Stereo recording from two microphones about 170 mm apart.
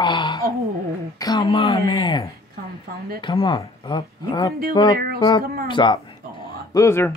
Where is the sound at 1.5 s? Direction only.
35° left (ahead or behind).